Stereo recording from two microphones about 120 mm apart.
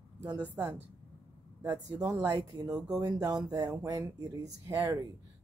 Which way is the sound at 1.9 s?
30° right (ahead or behind).